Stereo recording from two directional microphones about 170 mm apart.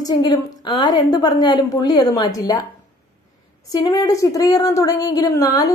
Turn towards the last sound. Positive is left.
turn(degrees=20)  # may be behind; listen again after turning